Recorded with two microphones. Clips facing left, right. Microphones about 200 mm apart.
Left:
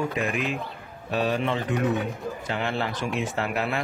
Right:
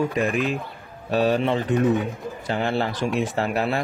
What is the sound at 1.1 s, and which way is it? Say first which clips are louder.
Speech: right 5 dB; 35° right (ahead or behind).